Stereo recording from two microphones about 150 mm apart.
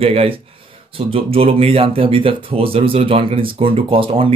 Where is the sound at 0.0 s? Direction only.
40° right (ahead or behind).